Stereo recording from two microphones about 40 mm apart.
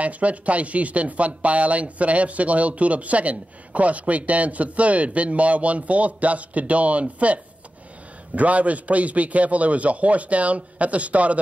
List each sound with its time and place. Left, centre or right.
0.0 s speech: right
8.4 s speech: right